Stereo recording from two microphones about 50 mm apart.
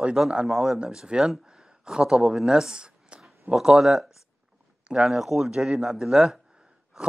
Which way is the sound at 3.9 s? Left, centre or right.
Centre.